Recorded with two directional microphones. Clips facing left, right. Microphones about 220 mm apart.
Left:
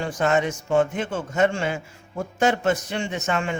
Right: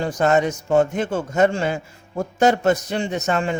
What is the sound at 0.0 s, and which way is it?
A man's voice, 40° right (ahead or behind).